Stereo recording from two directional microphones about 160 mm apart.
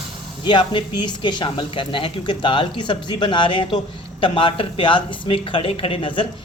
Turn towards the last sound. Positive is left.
turn(degrees=30)  # may be behind; listen again after turning